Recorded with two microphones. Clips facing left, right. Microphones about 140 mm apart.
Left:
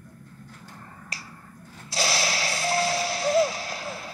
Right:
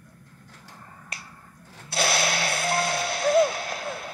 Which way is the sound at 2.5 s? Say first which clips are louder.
Right 1 dB; 65° right (ahead or behind).